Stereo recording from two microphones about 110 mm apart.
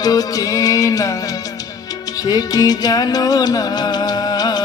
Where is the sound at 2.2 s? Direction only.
35° left (ahead or behind).